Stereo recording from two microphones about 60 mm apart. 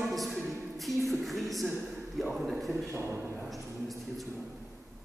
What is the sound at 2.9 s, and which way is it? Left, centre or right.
Speech, right.